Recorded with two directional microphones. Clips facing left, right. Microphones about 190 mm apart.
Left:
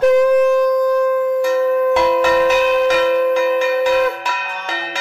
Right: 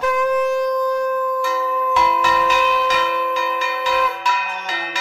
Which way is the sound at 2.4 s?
45° left (ahead or behind).